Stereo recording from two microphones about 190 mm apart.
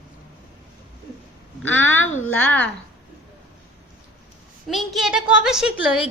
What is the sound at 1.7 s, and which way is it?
Speech, 85° left.